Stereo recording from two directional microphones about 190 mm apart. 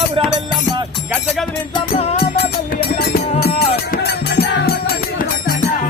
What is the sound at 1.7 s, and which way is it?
Music, 30° left (ahead or behind).